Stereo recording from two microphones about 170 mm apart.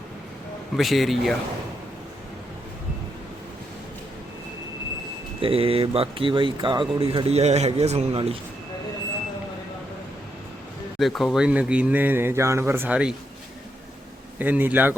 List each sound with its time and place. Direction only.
0.8 s a man's voice: centre (ahead or behind)
5.4 s speech: 35° right (ahead or behind)
11.0 s speech: centre (ahead or behind)
14.3 s speech: 10° right (ahead or behind)